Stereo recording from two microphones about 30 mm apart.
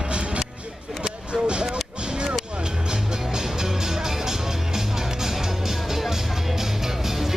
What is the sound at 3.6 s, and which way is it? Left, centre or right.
Music, centre.